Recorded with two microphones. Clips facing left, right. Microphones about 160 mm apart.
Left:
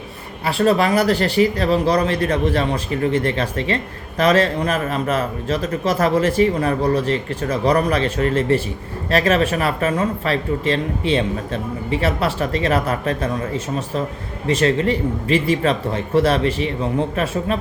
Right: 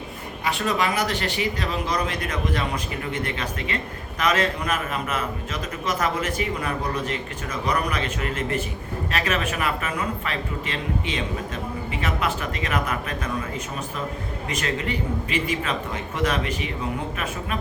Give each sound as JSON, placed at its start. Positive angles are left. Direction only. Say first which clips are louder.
{"t": 0.4, "sound": "speech", "louder": "left 8 dB", "side_deg": 35}
{"t": 14.4, "sound": "speech", "louder": "left 11 dB", "side_deg": 30}